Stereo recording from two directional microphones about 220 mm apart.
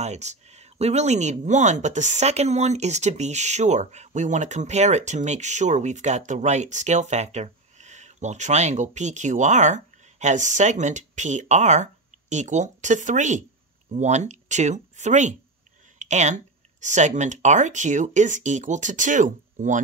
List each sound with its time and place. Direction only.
0.0 s speech: 30° right (ahead or behind)
16.0 s a sound: 30° right (ahead or behind)
16.8 s speech: 35° right (ahead or behind)